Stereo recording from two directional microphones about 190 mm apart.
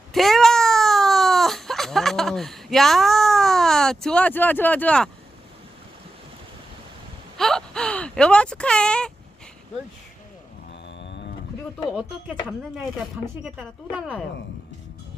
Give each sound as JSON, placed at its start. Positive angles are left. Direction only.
{"t": 0.1, "sound": "a sound", "side_deg": 0}
{"t": 7.3, "sound": "speech", "side_deg": 0}
{"t": 11.0, "sound": "cattle", "side_deg": 70}
{"t": 11.9, "sound": "speech", "side_deg": -5}
{"t": 13.4, "sound": "speech", "side_deg": -5}